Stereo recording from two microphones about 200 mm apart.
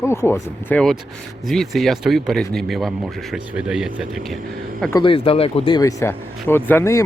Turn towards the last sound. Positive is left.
turn(degrees=15)  # may be behind; listen again after turning